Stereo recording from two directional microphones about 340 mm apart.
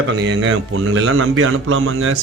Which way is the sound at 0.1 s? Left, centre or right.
Right.